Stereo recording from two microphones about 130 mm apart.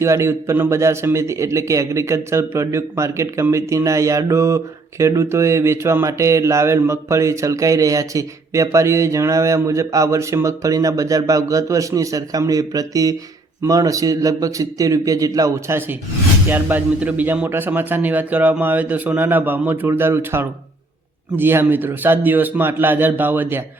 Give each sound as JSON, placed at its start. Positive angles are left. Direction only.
{"t": 0.0, "sound": "speech", "side_deg": -20}